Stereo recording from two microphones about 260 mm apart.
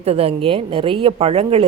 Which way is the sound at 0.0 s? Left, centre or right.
Right.